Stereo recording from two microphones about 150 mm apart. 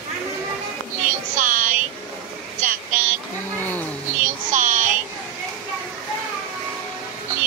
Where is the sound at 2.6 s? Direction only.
60° right (ahead or behind).